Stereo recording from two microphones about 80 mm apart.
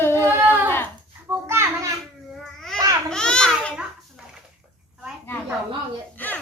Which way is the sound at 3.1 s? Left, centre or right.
Centre.